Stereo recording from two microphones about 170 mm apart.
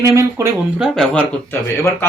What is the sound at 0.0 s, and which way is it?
Speech, 20° right (ahead or behind).